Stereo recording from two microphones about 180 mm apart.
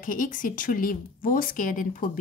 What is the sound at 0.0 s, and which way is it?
Speech, 50° left (ahead or behind).